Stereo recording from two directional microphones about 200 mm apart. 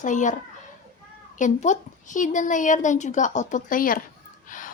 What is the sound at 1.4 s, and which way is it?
A woman's voice, 40° left (ahead or behind).